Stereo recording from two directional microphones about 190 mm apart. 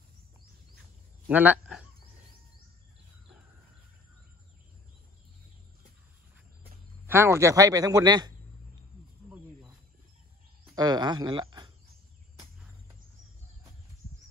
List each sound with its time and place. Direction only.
1.2 s a sound: 10° right (ahead or behind)
7.1 s speech: 15° right (ahead or behind)
10.7 s speech: 20° right (ahead or behind)